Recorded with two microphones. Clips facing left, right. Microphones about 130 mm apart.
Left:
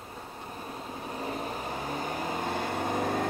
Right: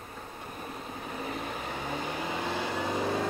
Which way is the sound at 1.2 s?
35° left (ahead or behind).